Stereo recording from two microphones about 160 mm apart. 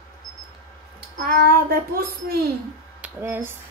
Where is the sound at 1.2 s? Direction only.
70° right (ahead or behind).